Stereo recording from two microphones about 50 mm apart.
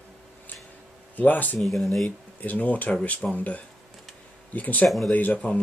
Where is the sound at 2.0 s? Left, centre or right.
Left.